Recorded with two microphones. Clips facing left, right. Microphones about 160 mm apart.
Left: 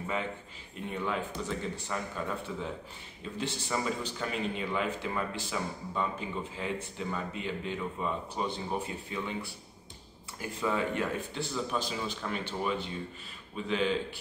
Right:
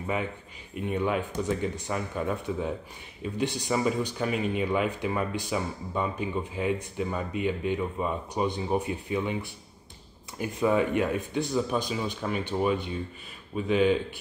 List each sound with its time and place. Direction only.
0.0 s speech: 15° right (ahead or behind)
10.5 s speech: 15° right (ahead or behind)